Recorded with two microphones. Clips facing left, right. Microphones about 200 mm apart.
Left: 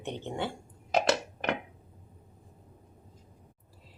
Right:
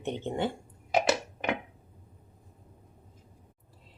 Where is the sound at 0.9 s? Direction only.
10° right (ahead or behind).